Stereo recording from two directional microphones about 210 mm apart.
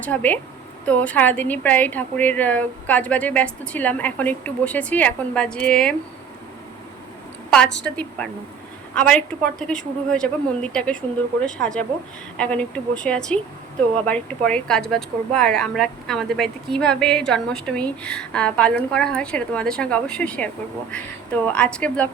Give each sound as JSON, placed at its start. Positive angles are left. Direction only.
{"t": 0.0, "sound": "speech", "side_deg": 5}
{"t": 7.5, "sound": "a woman's voice", "side_deg": 5}